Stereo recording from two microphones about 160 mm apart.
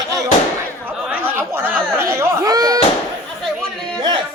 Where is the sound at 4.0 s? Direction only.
30° right (ahead or behind).